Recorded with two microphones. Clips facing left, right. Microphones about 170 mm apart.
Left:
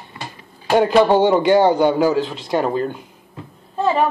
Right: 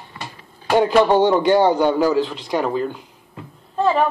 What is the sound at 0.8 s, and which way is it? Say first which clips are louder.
A man's voice: left 1 dB; 15° left (ahead or behind).